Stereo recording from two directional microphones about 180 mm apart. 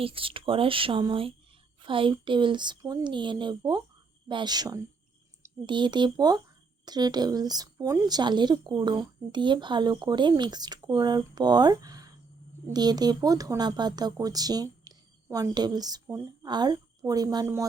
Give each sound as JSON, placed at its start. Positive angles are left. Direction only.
{"t": 0.0, "sound": "speech", "side_deg": -30}